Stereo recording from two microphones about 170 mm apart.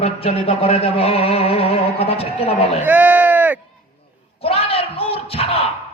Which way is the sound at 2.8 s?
10° right (ahead or behind).